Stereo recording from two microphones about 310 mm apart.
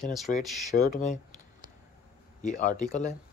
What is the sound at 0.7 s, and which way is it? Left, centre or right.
Speech, left.